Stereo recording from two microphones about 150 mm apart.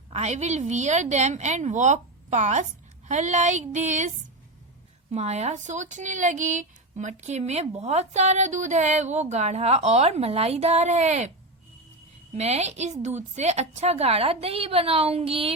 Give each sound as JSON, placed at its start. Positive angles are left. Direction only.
{"t": 0.1, "sound": "speech", "side_deg": -50}
{"t": 5.1, "sound": "speech", "side_deg": -45}
{"t": 12.3, "sound": "speech", "side_deg": -45}